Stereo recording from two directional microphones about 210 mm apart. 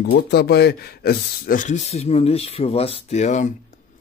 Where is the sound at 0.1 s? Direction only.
50° left (ahead or behind).